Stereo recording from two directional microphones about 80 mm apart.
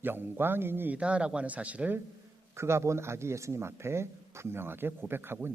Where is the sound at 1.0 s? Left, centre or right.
Centre.